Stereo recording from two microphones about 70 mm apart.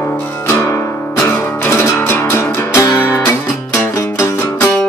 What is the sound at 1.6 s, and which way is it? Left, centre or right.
Music, left.